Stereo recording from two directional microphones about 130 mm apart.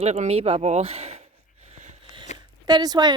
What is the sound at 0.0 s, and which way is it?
Speech, 60° right (ahead or behind).